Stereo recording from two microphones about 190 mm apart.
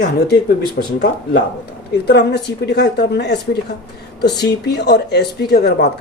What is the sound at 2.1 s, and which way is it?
A woman's voice, 60° left (ahead or behind).